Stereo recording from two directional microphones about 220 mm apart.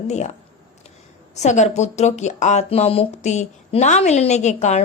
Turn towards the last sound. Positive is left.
turn(degrees=30)  # may be behind; listen again after turning